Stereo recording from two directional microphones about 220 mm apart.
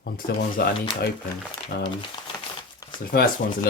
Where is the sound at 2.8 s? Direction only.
15° left (ahead or behind).